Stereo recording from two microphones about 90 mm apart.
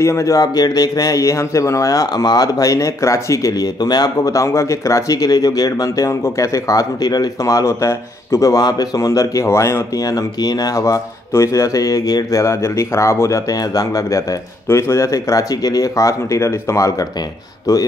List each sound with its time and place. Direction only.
0.0 s a man's voice: 35° left (ahead or behind)
10.0 s a man's voice: 45° left (ahead or behind)
14.7 s a man's voice: 30° left (ahead or behind)